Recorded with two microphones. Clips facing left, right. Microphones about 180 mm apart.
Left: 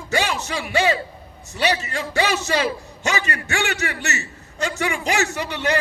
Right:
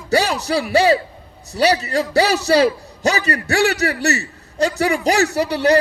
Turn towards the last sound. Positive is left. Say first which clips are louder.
# right 8 dB
turn(degrees=-35)  # may be behind; listen again after turning